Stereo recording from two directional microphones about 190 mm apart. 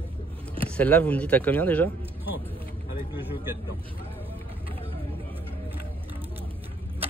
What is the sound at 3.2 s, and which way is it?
Speech, 10° right (ahead or behind).